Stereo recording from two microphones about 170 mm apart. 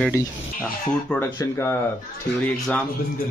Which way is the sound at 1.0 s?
5° left (ahead or behind).